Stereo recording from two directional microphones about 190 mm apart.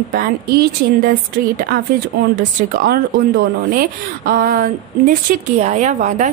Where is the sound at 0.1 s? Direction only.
55° right (ahead or behind).